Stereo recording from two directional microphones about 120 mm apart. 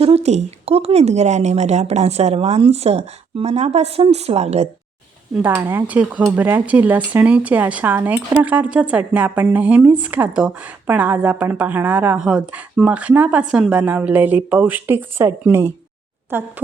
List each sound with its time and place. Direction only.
0.0 s speech: 60° right (ahead or behind)
5.4 s speech: 20° right (ahead or behind)